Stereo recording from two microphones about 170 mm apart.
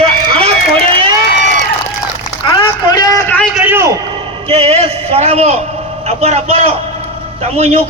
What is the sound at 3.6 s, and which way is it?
Speech, 10° right (ahead or behind).